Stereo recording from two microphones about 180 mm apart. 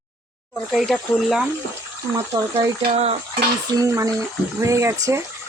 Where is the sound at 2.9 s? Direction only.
35° right (ahead or behind).